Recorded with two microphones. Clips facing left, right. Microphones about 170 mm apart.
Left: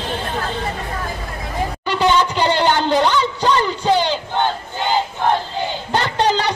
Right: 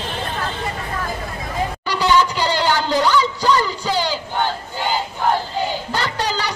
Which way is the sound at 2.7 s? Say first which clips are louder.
Left 2 dB; 20° left (ahead or behind).